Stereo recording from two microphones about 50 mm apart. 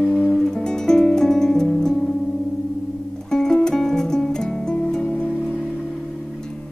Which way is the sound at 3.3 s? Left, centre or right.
Centre.